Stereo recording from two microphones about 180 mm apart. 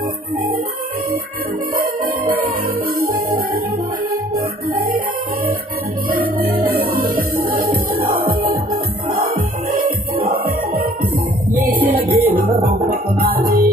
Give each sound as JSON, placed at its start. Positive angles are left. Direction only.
{"t": 3.0, "sound": "music", "side_deg": -55}
{"t": 6.1, "sound": "music", "side_deg": -55}
{"t": 11.6, "sound": "music", "side_deg": -60}